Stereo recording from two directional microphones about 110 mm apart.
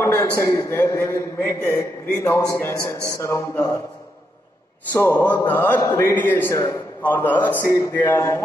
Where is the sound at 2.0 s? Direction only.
15° left (ahead or behind).